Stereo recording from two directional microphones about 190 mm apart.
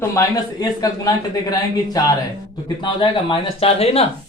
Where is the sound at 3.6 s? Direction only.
30° left (ahead or behind).